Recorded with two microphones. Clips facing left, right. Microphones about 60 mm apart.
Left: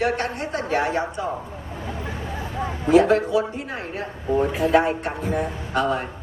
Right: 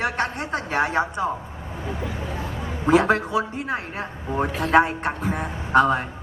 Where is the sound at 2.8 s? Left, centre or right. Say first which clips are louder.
Left 2 dB; right.